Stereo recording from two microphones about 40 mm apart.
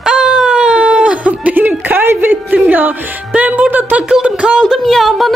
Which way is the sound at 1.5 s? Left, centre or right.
Right.